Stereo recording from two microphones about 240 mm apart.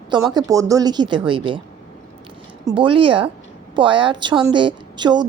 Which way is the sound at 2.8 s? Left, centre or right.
Right.